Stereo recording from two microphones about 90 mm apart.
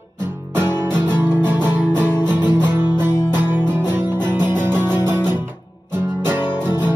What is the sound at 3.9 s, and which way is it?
Music, 25° right (ahead or behind).